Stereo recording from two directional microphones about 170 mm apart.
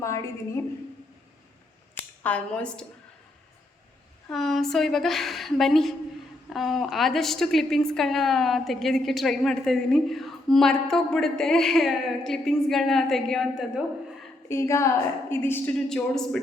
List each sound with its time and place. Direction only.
2.2 s speech: 5° left (ahead or behind)
4.3 s a woman's voice: centre (ahead or behind)
14.4 s a woman's voice: 15° left (ahead or behind)